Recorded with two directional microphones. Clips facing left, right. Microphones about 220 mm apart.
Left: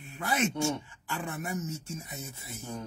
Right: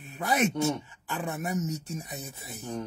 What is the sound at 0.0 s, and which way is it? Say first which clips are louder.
Speech: right 3 dB; 20° right (ahead or behind).